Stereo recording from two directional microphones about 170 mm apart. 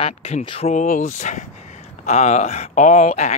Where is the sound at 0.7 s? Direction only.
45° left (ahead or behind).